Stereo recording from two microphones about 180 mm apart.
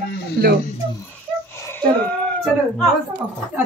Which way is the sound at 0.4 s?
60° right (ahead or behind).